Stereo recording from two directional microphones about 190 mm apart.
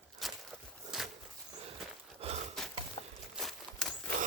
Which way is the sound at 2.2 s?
30° right (ahead or behind).